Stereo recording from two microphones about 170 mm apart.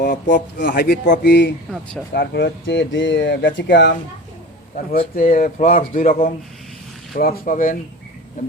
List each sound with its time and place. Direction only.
0.0 s speech: 70° left (ahead or behind)
1.3 s speech: 90° left
1.7 s speech: centre (ahead or behind)
2.1 s speech: 85° left
4.7 s speech: 55° left (ahead or behind)